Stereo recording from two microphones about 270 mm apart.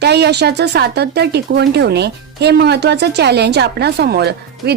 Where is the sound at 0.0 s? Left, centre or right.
Right.